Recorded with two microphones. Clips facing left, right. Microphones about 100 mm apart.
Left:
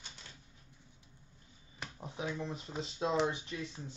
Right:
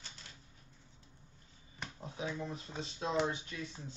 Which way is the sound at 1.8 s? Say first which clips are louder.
Even; 5° left (ahead or behind).